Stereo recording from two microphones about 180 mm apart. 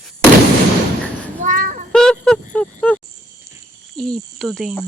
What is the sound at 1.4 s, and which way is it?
Speech, 45° right (ahead or behind).